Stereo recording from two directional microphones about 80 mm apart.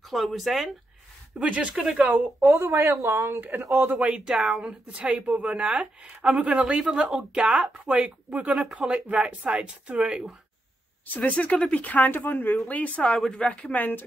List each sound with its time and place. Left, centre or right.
0.1 s speech: centre
1.4 s speech: centre
2.1 s speech: right
4.0 s speech: centre
11.1 s speech: centre
13.1 s speech: centre
13.4 s speech: centre